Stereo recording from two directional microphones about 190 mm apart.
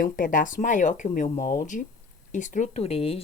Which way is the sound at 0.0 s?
45° left (ahead or behind).